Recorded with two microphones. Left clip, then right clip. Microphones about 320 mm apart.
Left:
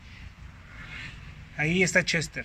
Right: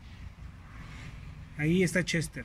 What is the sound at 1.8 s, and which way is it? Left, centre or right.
Speech, centre.